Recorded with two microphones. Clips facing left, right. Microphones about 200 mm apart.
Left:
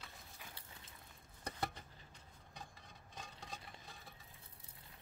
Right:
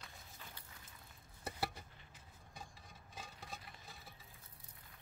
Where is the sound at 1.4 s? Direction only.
5° right (ahead or behind).